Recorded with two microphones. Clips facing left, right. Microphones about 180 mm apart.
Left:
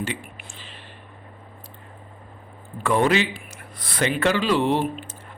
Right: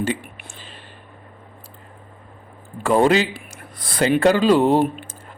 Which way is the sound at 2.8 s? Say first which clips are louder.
Right 4 dB; 35° right (ahead or behind).